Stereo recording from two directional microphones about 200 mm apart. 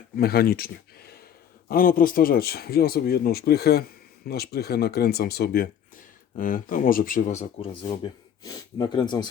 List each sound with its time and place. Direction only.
0.2 s speech: 50° left (ahead or behind); by 9.3 s 20° left (ahead or behind)